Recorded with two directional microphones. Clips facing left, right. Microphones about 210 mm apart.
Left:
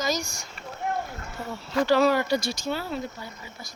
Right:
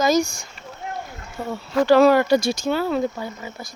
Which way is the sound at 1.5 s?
55° right (ahead or behind).